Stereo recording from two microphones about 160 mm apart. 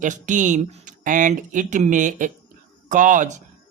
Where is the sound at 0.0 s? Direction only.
50° right (ahead or behind).